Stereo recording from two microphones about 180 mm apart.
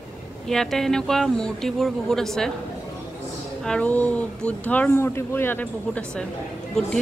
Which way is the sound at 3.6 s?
5° left (ahead or behind).